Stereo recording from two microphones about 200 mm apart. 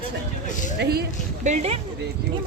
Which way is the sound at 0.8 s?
50° right (ahead or behind).